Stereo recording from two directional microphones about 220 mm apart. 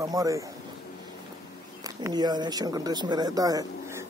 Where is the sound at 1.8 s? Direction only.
15° right (ahead or behind).